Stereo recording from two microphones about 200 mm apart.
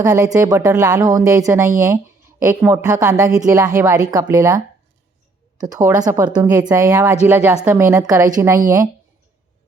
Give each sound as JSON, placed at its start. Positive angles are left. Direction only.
{"t": 0.0, "sound": "a woman's voice", "side_deg": -15}